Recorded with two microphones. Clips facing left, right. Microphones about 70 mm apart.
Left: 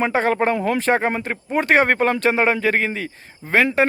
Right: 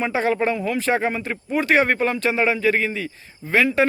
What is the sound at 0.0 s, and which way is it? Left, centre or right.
A man's voice, left.